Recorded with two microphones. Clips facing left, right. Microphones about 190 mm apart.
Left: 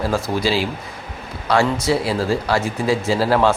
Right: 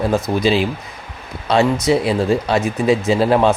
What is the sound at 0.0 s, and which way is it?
Speech, 20° right (ahead or behind).